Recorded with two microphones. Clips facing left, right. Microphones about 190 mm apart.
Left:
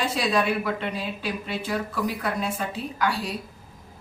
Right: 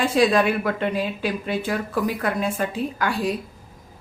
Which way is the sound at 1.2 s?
55° right (ahead or behind).